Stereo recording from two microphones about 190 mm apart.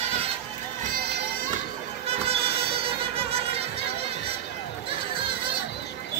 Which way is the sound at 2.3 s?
30° right (ahead or behind).